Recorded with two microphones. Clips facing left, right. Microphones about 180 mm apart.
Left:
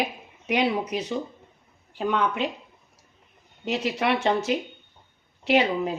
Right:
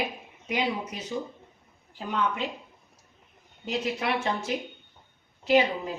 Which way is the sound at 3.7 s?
70° left (ahead or behind).